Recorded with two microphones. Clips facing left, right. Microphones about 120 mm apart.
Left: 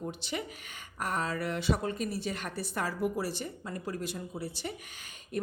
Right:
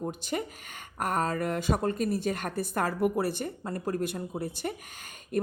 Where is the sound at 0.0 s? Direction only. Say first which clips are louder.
Right 4 dB; 45° right (ahead or behind).